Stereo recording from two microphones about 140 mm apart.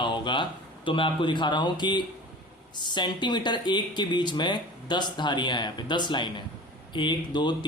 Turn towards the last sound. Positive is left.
turn(degrees=35)  # may be behind; listen again after turning